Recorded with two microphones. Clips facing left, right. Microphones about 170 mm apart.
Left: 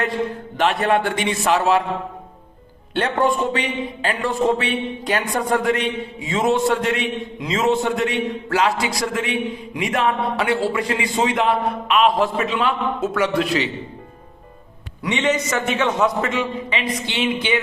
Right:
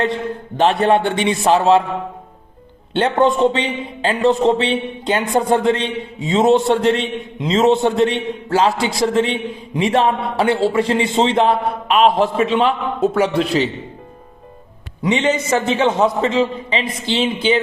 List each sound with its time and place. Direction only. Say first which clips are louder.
0.5 s a man's voice: right 5 dB; 30° right (ahead or behind)
2.9 s a man's voice: right 4 dB; 25° right (ahead or behind)
15.0 s a man's voice: right 3 dB; 30° right (ahead or behind)